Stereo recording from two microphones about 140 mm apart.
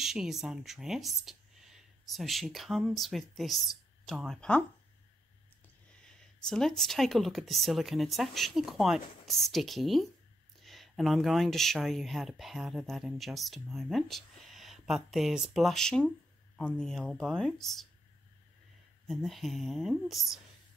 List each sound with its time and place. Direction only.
0.0 s speech: 5° right (ahead or behind)
6.0 s speech: 5° left (ahead or behind)
19.0 s speech: centre (ahead or behind)